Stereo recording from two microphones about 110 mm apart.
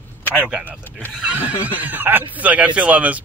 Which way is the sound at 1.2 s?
10° right (ahead or behind).